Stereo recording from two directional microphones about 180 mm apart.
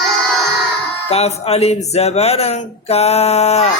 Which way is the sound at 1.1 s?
35° left (ahead or behind).